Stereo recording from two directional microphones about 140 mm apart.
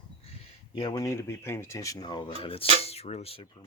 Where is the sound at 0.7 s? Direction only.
30° left (ahead or behind).